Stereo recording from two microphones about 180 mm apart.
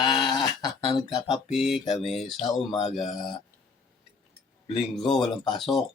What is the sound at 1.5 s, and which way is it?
Speech, centre (ahead or behind).